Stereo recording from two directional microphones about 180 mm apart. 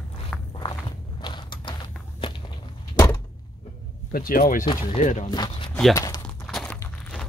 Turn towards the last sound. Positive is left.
turn(degrees=5)  # may be behind; listen again after turning